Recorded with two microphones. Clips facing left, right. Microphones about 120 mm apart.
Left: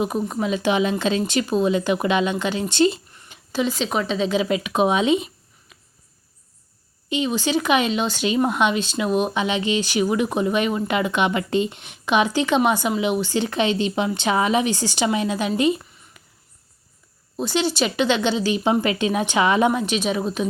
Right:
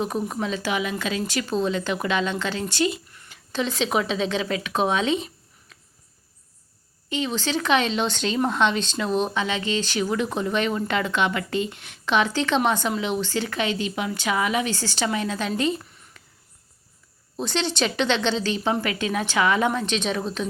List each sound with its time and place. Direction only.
0.0 s speech: 5° left (ahead or behind)
0.5 s a woman's voice: 20° left (ahead or behind)
3.5 s speech: 5° left (ahead or behind)
7.1 s speech: 15° left (ahead or behind)
15.8 s a sound: 5° left (ahead or behind)
17.3 s speech: 5° left (ahead or behind)